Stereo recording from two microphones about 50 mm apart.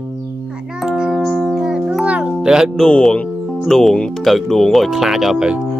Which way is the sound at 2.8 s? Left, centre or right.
Centre.